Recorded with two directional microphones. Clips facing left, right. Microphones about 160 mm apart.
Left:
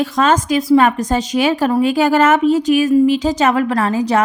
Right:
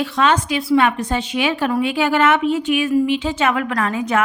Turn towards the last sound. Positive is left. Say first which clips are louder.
# left 4 dB
turn(degrees=35)  # may be behind; listen again after turning